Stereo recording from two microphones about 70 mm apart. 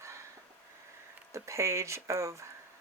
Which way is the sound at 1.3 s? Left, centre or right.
Right.